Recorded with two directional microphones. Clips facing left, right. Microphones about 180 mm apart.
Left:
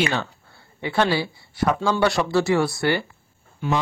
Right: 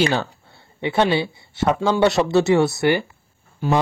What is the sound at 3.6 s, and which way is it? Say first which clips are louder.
Speech: right 4 dB; 35° right (ahead or behind).